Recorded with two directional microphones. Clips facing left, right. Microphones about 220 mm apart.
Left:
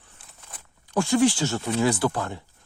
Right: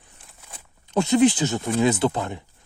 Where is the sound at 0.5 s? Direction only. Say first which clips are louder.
Right 2 dB; 20° right (ahead or behind).